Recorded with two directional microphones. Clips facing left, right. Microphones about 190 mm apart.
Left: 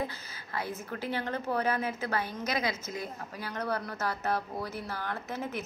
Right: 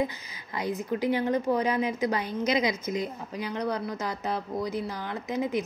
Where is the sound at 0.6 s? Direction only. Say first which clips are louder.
Right 7 dB; 15° right (ahead or behind).